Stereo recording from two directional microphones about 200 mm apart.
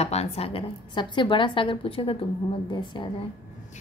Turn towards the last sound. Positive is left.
turn(degrees=25)  # may be behind; listen again after turning